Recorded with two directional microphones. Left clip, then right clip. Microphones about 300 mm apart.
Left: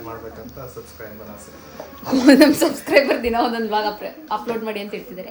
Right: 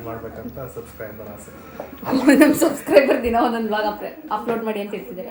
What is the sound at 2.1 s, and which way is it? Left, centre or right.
Speech, left.